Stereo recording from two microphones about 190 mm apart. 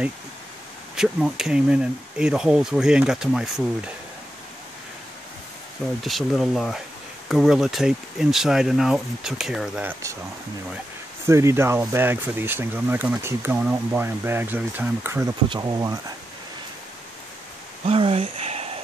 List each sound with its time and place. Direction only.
0.9 s speech: centre (ahead or behind)
6.0 s speech: centre (ahead or behind)
11.2 s speech: 15° right (ahead or behind)
17.8 s speech: 30° right (ahead or behind)